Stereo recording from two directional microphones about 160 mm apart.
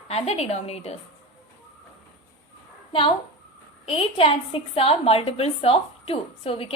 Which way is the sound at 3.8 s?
35° left (ahead or behind).